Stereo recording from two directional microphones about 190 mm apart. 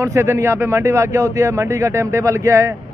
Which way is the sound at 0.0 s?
15° right (ahead or behind).